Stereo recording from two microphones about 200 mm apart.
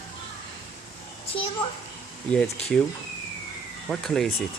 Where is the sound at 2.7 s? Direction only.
5° left (ahead or behind).